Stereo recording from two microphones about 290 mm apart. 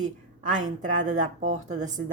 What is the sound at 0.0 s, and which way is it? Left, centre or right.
Speech, right.